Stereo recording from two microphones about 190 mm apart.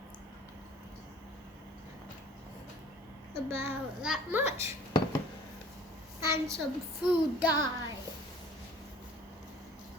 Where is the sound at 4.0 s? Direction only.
5° right (ahead or behind).